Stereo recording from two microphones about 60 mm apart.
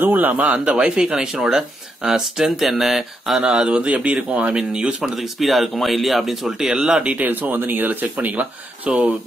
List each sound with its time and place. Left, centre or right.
0.0 s speech: right
4.6 s speech: centre
6.7 s speech: centre